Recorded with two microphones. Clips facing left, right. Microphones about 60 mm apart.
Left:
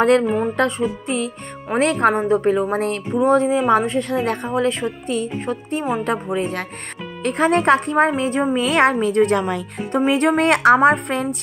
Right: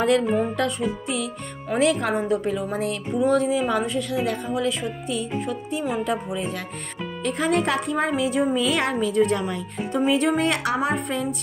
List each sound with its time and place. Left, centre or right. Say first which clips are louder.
0.6 s a woman's voice: left 5 dB; left
3.2 s a woman's voice: left 4 dB; left